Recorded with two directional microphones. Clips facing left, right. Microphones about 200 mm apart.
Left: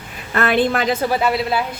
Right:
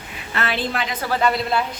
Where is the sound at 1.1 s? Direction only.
5° left (ahead or behind).